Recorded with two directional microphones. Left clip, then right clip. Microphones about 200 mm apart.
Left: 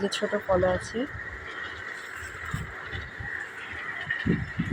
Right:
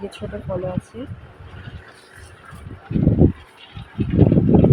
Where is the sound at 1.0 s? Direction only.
35° left (ahead or behind).